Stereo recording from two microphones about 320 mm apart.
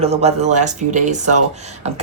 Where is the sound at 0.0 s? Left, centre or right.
Centre.